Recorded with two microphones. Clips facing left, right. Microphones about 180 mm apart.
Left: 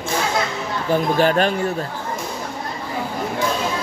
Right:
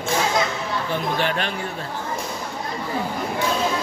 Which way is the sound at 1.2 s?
40° left (ahead or behind).